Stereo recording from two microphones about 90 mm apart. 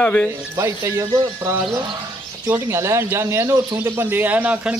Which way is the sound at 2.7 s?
30° right (ahead or behind).